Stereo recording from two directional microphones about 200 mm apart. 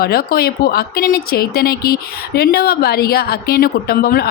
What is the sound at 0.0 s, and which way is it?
Speech, 50° left (ahead or behind).